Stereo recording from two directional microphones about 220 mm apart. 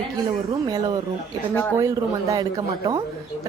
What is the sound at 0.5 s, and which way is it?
Speech, 15° right (ahead or behind).